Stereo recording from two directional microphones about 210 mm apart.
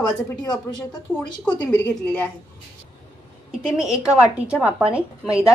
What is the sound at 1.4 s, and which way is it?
Speech, 5° left (ahead or behind).